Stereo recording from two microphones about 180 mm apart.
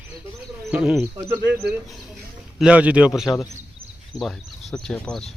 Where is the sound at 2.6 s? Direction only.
5° right (ahead or behind).